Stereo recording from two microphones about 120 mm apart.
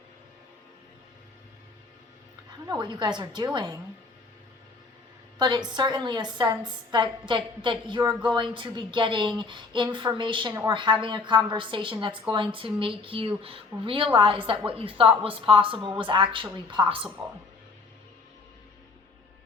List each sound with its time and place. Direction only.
2.6 s a woman's voice: 40° right (ahead or behind)
5.4 s a woman's voice: 40° right (ahead or behind)